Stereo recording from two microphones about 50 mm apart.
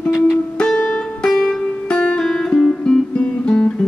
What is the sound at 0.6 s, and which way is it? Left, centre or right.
Music, centre.